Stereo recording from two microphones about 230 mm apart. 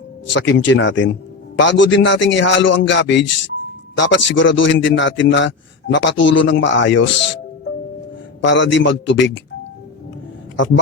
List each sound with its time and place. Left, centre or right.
0.3 s a man's voice: left